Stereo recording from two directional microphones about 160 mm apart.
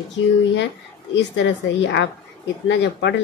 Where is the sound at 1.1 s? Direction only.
90° left.